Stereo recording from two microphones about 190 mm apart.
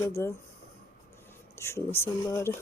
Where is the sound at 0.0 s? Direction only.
15° left (ahead or behind).